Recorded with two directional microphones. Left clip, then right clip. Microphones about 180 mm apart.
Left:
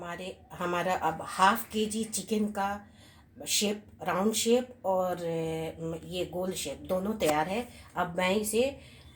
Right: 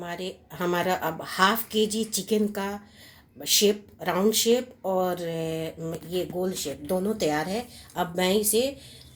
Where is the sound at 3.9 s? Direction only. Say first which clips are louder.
Right 5 dB; 40° right (ahead or behind).